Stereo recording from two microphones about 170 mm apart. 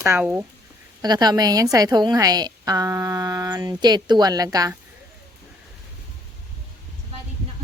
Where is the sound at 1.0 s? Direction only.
25° right (ahead or behind).